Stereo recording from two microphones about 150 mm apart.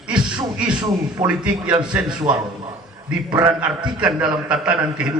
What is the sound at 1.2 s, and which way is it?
Speech, 45° right (ahead or behind).